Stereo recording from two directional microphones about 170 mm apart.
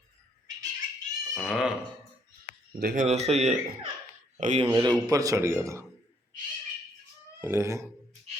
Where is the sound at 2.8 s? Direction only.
60° right (ahead or behind).